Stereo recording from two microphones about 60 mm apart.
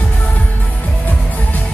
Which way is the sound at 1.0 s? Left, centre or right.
Left.